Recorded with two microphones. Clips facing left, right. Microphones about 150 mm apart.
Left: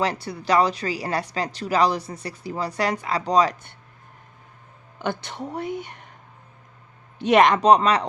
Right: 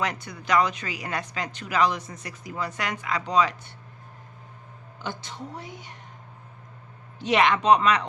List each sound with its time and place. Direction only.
0.0 s speech: 30° left (ahead or behind)
4.9 s speech: 65° left (ahead or behind)
7.2 s speech: 50° left (ahead or behind); by 8.0 s 35° left (ahead or behind)